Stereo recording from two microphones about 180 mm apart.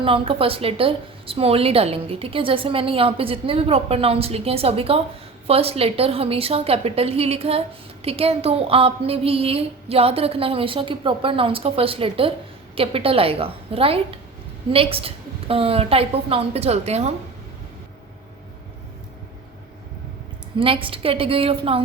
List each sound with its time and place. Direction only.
0.0 s a woman's voice: 30° right (ahead or behind)
20.6 s a woman's voice: 30° right (ahead or behind)